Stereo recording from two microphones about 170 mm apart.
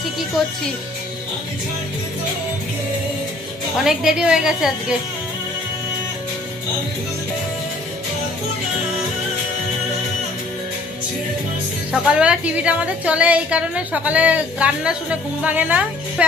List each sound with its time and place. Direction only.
3.8 s a woman's voice: 5° right (ahead or behind)
11.9 s a woman's voice: 5° right (ahead or behind)